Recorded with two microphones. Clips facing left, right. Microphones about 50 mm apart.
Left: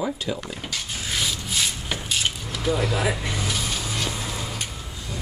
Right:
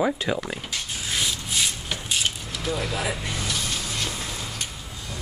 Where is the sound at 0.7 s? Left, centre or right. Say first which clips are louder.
Even; centre.